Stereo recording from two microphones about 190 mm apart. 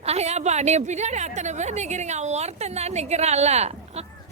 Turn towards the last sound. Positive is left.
turn(degrees=-35)  # may be behind; listen again after turning